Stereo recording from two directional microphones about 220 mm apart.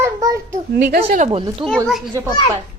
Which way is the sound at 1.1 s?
30° right (ahead or behind).